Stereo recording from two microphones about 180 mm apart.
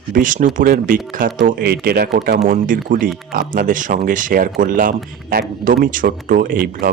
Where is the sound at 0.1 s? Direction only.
50° right (ahead or behind).